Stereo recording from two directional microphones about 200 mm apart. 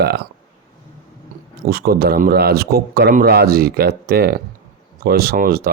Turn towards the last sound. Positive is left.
turn(degrees=-45)  # may be behind; listen again after turning